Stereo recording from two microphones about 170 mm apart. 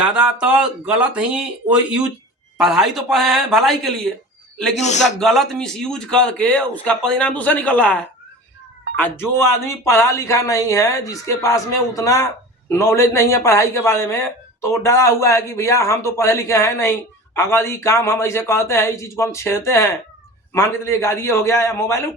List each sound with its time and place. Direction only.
0.0 s a man's voice: 5° right (ahead or behind)
5.2 s a man's voice: centre (ahead or behind)
9.0 s speech: 10° left (ahead or behind)